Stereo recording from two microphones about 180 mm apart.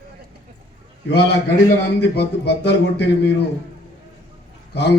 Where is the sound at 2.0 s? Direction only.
65° left (ahead or behind).